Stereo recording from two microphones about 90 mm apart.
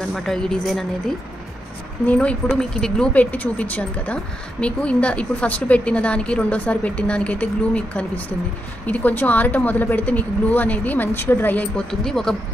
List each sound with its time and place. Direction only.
0.1 s a woman's voice: 5° left (ahead or behind)
11.9 s a woman's voice: 5° left (ahead or behind)